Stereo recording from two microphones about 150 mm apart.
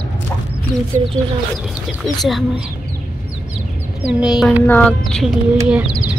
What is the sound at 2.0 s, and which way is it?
Speech, centre (ahead or behind).